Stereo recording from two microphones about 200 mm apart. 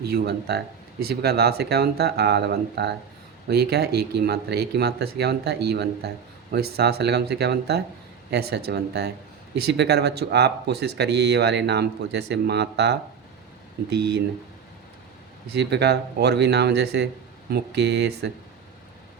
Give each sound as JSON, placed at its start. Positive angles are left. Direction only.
{"t": 0.1, "sound": "speech", "side_deg": -55}
{"t": 15.5, "sound": "speech", "side_deg": -55}